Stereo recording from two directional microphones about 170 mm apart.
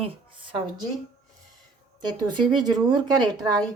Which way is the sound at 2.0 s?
25° right (ahead or behind).